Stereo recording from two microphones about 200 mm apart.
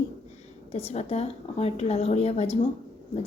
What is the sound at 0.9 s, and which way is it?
A woman's voice, 30° left (ahead or behind).